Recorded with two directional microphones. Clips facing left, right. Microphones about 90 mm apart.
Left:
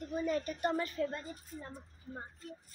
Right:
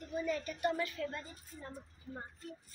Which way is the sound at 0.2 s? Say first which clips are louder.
Left 1 dB; 40° left (ahead or behind).